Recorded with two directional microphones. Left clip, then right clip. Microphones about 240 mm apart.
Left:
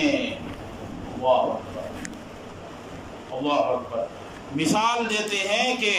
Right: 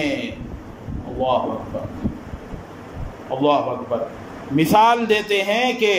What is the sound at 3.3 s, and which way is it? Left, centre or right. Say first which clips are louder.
Speech: right 9 dB; right.